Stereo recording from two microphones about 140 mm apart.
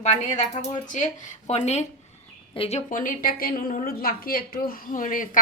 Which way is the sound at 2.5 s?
40° left (ahead or behind).